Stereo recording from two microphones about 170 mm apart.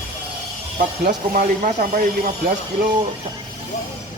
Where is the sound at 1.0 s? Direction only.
55° right (ahead or behind).